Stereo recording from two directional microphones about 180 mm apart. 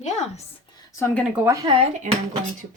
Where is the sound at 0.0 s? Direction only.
40° left (ahead or behind).